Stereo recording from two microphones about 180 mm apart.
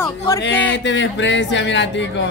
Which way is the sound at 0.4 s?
85° left.